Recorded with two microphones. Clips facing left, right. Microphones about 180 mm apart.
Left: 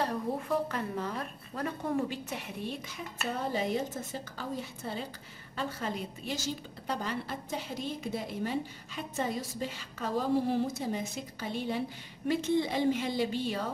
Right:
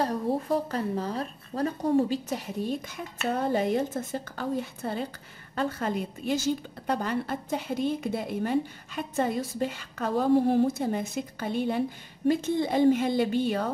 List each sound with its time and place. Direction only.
0.0 s speech: 40° right (ahead or behind)
3.5 s a woman's voice: 60° right (ahead or behind)